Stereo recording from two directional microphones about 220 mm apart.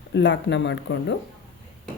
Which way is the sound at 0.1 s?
55° left (ahead or behind).